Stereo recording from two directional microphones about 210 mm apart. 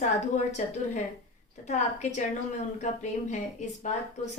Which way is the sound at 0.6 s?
35° left (ahead or behind).